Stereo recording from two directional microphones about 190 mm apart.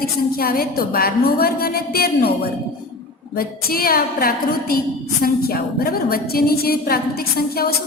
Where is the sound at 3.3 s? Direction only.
50° left (ahead or behind).